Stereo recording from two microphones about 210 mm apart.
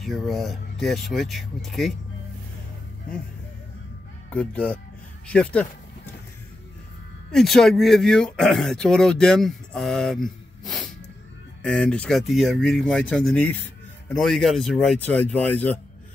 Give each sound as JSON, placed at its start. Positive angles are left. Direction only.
{"t": 0.0, "sound": "speech", "side_deg": 0}
{"t": 4.3, "sound": "speech", "side_deg": 5}
{"t": 7.3, "sound": "speech", "side_deg": 0}